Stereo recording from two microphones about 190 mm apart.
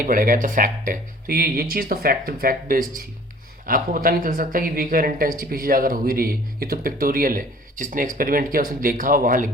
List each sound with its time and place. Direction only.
0.0 s speech: 45° right (ahead or behind)